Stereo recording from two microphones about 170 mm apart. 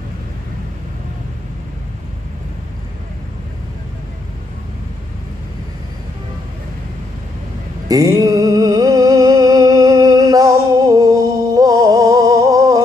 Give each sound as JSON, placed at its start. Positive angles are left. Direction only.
{"t": 7.9, "sound": "music", "side_deg": -20}